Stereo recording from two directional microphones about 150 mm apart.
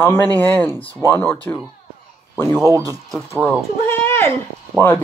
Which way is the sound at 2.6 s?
25° right (ahead or behind).